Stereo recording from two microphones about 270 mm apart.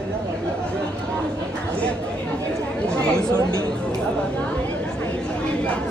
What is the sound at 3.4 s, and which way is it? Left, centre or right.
Chatter, centre.